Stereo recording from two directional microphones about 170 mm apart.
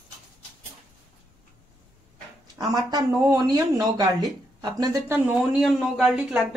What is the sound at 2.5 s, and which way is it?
Speech, 20° right (ahead or behind).